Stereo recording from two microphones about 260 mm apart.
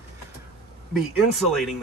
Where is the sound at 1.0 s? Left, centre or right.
Centre.